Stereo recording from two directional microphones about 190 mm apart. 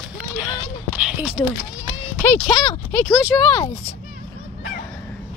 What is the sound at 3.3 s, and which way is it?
Speech, 25° left (ahead or behind).